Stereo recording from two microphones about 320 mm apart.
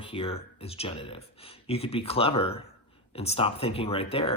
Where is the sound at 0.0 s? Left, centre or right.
Centre.